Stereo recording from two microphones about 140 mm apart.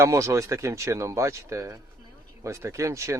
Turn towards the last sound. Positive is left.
turn(degrees=-20)  # may be behind; listen again after turning